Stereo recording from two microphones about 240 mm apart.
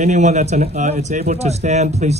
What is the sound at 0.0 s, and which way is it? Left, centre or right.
Speech, right.